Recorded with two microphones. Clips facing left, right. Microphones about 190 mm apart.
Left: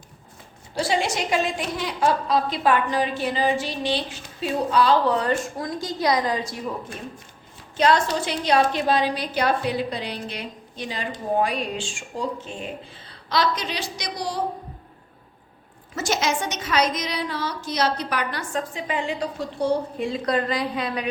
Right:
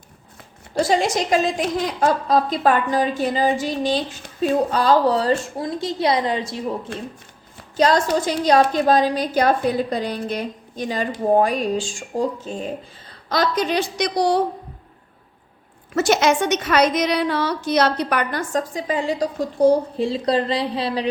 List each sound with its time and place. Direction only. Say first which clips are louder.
0.8 s a woman's voice: right 5 dB; 45° right (ahead or behind); by 6.7 s 25° right (ahead or behind)
7.8 s a woman's voice: right 3 dB; 40° right (ahead or behind); by 14.4 s 65° right (ahead or behind)
16.0 s a woman's voice: right 7 dB; 65° right (ahead or behind); by 21.1 s 30° right (ahead or behind)